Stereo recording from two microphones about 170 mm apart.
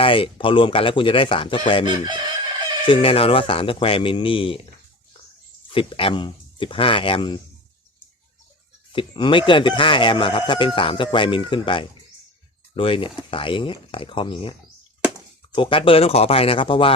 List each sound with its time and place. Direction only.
0.0 s speech: 30° left (ahead or behind)
1.8 s chicken: 25° right (ahead or behind)
2.8 s speech: 30° left (ahead or behind)
5.7 s speech: 30° left (ahead or behind)
8.9 s speech: 30° left (ahead or behind)
15.5 s speech: 30° left (ahead or behind)